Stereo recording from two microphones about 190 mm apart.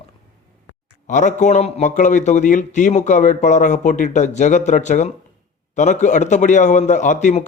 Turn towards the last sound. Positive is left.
turn(degrees=40)  # may be behind; listen again after turning